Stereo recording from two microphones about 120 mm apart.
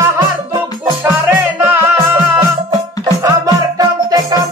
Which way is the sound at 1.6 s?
15° right (ahead or behind).